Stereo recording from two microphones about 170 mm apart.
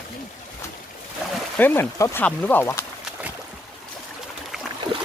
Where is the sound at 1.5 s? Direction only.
10° left (ahead or behind).